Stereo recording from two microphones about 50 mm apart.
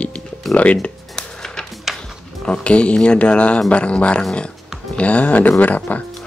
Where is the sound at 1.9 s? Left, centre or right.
Centre.